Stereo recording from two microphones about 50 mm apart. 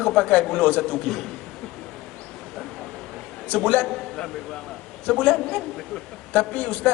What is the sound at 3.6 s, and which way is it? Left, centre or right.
A man's voice, centre.